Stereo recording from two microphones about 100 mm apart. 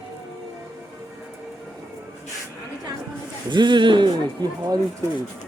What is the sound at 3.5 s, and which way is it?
Speech, 50° right (ahead or behind).